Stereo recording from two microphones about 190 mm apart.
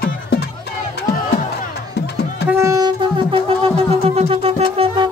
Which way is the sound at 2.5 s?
15° right (ahead or behind).